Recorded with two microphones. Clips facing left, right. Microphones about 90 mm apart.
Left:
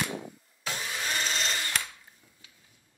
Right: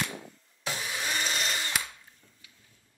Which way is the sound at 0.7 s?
10° right (ahead or behind).